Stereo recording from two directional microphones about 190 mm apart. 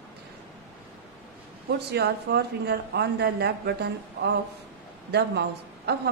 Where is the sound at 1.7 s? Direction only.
60° right (ahead or behind).